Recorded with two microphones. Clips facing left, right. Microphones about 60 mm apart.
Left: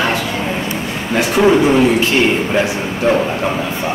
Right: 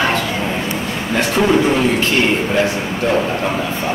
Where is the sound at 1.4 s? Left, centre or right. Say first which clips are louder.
Left 4 dB; centre.